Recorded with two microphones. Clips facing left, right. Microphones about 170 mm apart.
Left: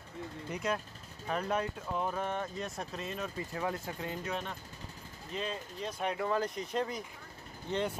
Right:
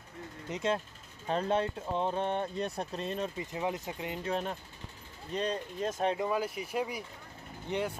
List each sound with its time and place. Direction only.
0.5 s speech: 25° right (ahead or behind)
3.3 s speech: 20° right (ahead or behind)
4.3 s speech: 35° right (ahead or behind)
6.2 s speech: 10° right (ahead or behind)